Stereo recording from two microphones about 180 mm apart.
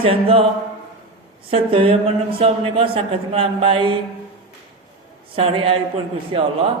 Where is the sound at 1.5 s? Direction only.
30° right (ahead or behind).